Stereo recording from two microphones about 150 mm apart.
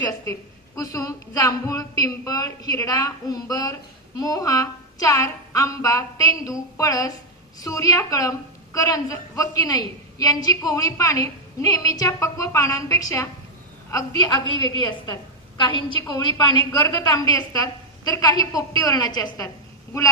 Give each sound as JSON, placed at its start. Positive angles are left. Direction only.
{"t": 0.8, "sound": "a woman's voice", "side_deg": 25}